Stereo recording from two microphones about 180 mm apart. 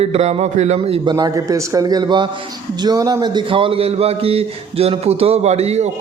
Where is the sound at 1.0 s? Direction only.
20° right (ahead or behind).